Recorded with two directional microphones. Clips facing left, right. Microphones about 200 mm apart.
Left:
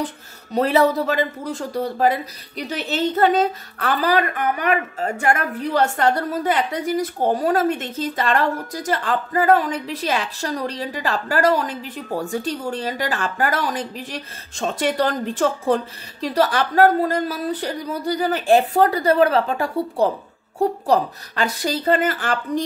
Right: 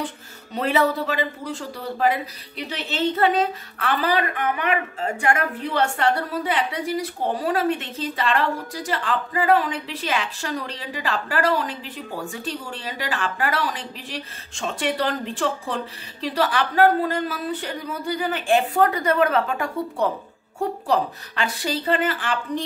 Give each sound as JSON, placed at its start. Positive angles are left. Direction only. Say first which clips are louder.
{"t": 0.0, "sound": "speech", "louder": "left 3 dB", "side_deg": 40}